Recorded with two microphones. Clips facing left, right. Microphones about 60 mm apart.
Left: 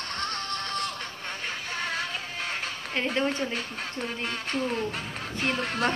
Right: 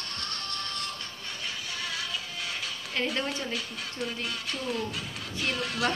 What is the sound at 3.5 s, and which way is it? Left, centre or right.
Speech, left.